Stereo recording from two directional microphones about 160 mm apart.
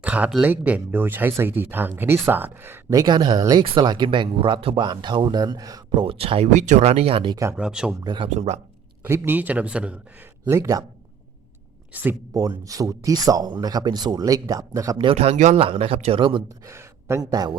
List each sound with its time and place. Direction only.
0.0 s speech: 10° right (ahead or behind); by 7.3 s 35° right (ahead or behind)
7.5 s speech: 5° right (ahead or behind)
8.0 s speech: 30° right (ahead or behind)
8.3 s speech: 45° right (ahead or behind)
9.0 s speech: 15° right (ahead or behind)
10.4 s speech: 15° right (ahead or behind)
12.3 s speech: 20° right (ahead or behind)
16.6 s speech: 15° right (ahead or behind)